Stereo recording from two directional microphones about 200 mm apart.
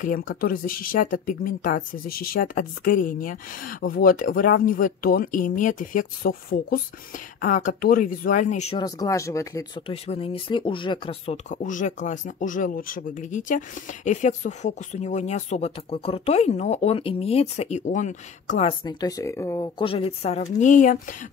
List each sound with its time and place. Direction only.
0.3 s speech: 45° left (ahead or behind)
8.7 s speech: 20° left (ahead or behind)
10.0 s speech: 30° left (ahead or behind)